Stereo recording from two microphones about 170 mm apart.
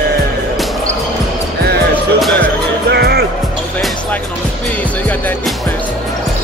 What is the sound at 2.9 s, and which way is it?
Music, 70° right (ahead or behind).